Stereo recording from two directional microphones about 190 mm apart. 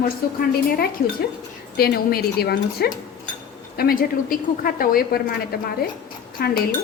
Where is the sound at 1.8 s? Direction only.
55° left (ahead or behind).